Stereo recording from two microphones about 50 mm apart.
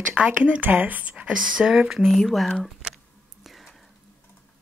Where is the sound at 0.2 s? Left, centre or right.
Right.